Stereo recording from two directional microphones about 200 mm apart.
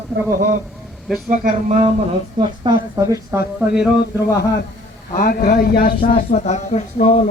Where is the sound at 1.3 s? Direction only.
35° right (ahead or behind).